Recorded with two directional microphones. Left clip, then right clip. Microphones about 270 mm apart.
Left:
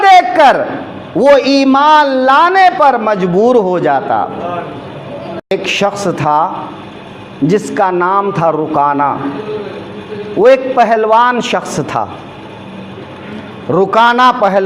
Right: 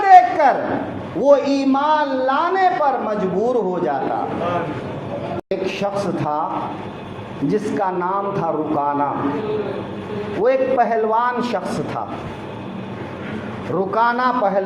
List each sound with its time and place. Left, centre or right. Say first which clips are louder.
0.0 s a sound: left 5 dB; left
1.2 s a man's voice: left 7 dB; left
5.5 s a man's voice: left 10 dB; left
7.4 s a man's voice: left 8 dB; left
10.4 s a man's voice: left 9 dB; left
13.7 s a man's voice: left 10 dB; left